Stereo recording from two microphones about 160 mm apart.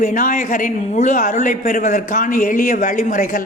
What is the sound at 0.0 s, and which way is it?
A man's voice, 55° left (ahead or behind).